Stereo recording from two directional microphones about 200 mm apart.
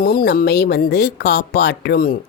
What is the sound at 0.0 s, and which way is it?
Speech, 45° left (ahead or behind).